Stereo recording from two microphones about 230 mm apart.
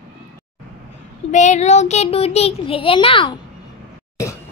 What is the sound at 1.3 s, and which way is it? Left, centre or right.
A child's voice, left.